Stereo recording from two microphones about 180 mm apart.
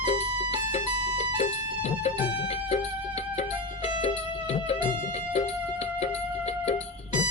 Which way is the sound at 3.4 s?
35° left (ahead or behind).